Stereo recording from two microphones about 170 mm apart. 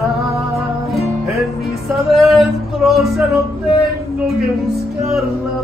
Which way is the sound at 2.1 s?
Centre (ahead or behind).